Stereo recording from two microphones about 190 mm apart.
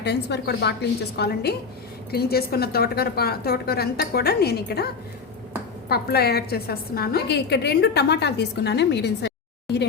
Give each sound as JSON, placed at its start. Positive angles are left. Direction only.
{"t": 0.0, "sound": "a woman's voice", "side_deg": 65}
{"t": 5.9, "sound": "a woman's voice", "side_deg": 55}